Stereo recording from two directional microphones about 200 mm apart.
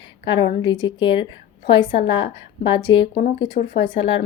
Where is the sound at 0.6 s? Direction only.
25° left (ahead or behind).